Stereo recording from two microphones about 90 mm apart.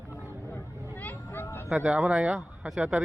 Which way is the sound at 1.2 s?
25° left (ahead or behind).